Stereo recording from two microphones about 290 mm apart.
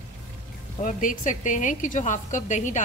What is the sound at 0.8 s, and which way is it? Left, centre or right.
A woman's voice, left.